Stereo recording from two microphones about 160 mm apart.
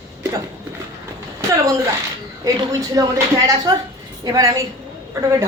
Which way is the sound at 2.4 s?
25° right (ahead or behind).